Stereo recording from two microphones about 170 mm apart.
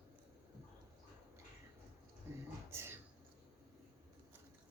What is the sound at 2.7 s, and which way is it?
Whispering, 15° right (ahead or behind).